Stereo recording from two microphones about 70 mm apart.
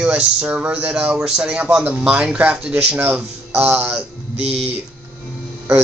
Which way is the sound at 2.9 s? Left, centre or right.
Right.